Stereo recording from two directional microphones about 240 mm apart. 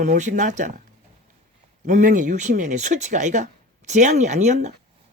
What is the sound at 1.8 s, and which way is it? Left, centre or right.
Speech, right.